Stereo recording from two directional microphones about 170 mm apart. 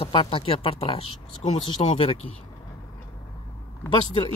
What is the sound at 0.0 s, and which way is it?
Speech, 30° left (ahead or behind).